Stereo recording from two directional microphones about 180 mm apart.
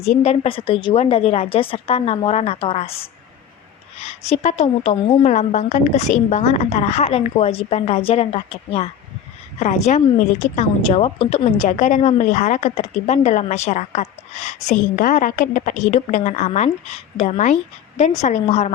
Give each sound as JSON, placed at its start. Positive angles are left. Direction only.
{"t": 0.2, "sound": "a woman's voice", "side_deg": 35}